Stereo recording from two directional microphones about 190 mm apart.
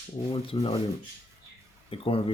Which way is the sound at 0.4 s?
30° left (ahead or behind).